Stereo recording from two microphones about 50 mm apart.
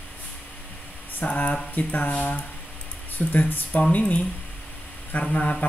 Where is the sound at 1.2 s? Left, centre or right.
Left.